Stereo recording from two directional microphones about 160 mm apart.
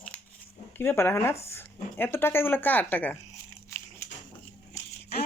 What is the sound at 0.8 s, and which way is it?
Speech, 15° left (ahead or behind).